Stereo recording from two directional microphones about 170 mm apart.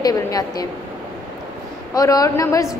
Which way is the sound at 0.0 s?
20° left (ahead or behind).